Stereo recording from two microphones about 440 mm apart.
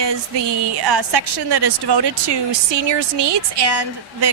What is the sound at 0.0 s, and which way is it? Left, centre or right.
A woman's voice, right.